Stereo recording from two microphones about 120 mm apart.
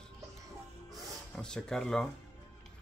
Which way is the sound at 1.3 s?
5° left (ahead or behind).